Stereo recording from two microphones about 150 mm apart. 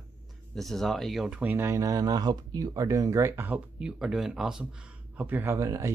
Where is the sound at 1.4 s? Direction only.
15° right (ahead or behind).